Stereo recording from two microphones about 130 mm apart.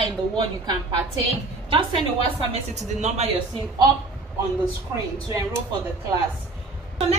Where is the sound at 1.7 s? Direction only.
40° right (ahead or behind).